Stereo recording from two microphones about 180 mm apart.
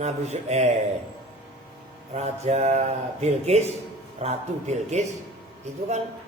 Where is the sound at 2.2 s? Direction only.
35° right (ahead or behind).